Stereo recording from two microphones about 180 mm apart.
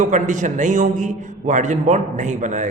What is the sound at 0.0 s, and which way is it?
A man's voice, 45° right (ahead or behind).